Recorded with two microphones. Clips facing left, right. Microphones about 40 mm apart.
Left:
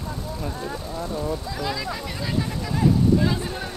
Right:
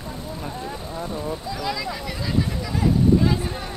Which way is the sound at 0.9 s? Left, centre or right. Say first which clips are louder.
Left 1 dB; right.